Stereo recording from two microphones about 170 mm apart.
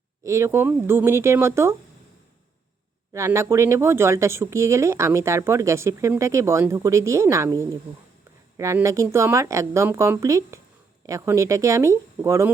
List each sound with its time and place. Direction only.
0.3 s speech: 15° right (ahead or behind)
3.1 s speech: 15° right (ahead or behind)